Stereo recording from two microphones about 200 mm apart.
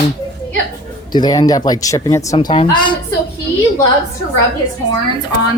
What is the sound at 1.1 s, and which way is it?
Speech, 20° left (ahead or behind).